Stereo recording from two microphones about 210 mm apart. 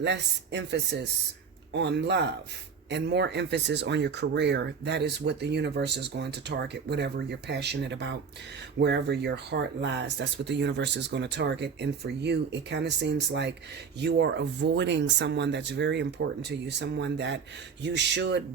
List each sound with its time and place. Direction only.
0.0 s speech: 55° right (ahead or behind)